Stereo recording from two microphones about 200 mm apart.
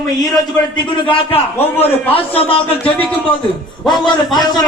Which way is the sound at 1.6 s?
10° left (ahead or behind).